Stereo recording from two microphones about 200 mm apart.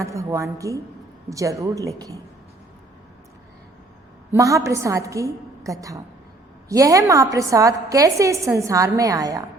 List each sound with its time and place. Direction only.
0.0 s a woman's voice: 15° right (ahead or behind)
4.4 s a woman's voice: 15° right (ahead or behind)